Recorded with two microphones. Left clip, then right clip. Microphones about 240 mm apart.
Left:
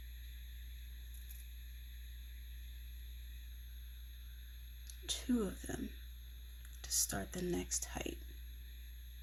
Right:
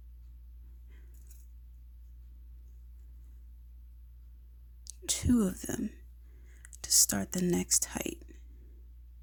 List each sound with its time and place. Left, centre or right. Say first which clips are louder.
4.9 s speech: right 8 dB; right
6.8 s speech: right 11 dB; right